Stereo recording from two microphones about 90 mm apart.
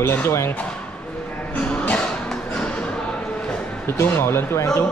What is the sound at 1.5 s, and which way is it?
Music, 15° left (ahead or behind).